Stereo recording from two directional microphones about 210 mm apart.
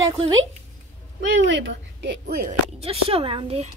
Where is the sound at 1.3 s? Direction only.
60° right (ahead or behind).